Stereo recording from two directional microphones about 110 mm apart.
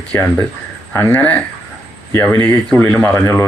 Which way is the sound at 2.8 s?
20° left (ahead or behind).